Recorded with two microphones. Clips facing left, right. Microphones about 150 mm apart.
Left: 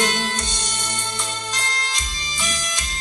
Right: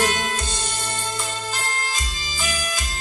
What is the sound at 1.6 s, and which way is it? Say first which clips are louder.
Music: right 1 dB; 85° left.